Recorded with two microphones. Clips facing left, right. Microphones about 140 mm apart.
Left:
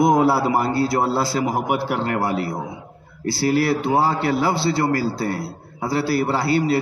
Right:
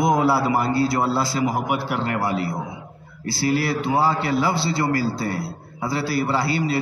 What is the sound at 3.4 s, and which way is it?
A man's voice, 50° left (ahead or behind).